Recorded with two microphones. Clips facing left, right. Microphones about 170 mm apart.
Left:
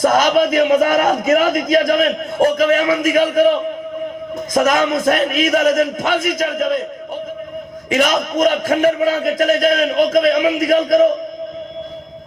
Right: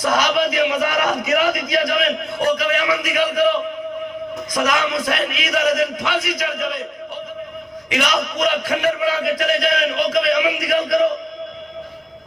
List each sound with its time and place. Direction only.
0.0 s a man's voice: 45° left (ahead or behind)
7.9 s a man's voice: 45° left (ahead or behind)